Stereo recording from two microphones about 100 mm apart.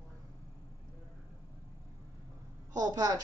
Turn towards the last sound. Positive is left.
turn(degrees=-40)  # may be behind; listen again after turning